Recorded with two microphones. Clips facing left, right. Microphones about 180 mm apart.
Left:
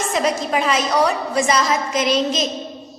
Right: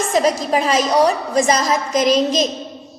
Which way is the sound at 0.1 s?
35° right (ahead or behind).